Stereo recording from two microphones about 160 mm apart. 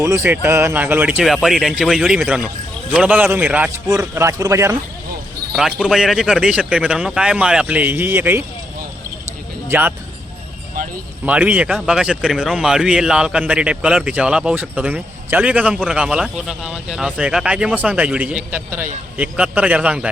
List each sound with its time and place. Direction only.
0.0 s speech: 15° right (ahead or behind)
5.5 s speech: 5° right (ahead or behind)
9.6 s speech: 10° right (ahead or behind)
11.3 s speech: 10° right (ahead or behind)